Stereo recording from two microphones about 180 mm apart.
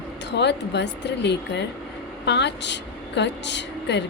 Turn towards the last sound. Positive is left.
turn(degrees=75)  # may be behind; listen again after turning